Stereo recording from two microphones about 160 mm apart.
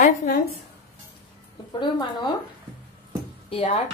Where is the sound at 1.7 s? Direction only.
25° left (ahead or behind).